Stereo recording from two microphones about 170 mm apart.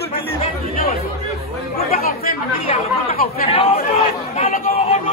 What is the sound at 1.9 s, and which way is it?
Speech, 60° left (ahead or behind).